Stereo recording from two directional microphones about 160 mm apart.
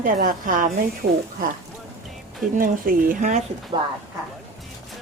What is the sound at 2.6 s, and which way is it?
Speech, 60° right (ahead or behind).